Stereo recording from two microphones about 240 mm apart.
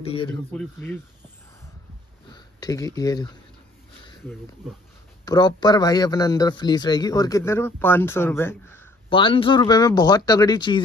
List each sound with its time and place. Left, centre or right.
0.0 s a man's voice: left
0.3 s a man's voice: centre
2.3 s speech: centre
5.2 s a man's voice: centre
9.1 s a man's voice: left